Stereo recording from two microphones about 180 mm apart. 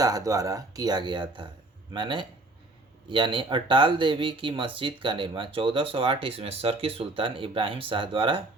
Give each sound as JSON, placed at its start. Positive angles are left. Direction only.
{"t": 0.0, "sound": "speech", "side_deg": -20}